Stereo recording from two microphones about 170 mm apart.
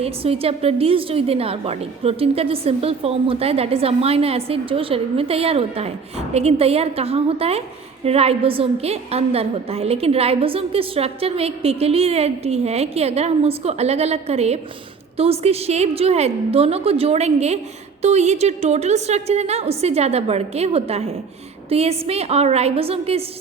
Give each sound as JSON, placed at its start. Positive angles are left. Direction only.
{"t": 0.0, "sound": "a woman's voice", "side_deg": -35}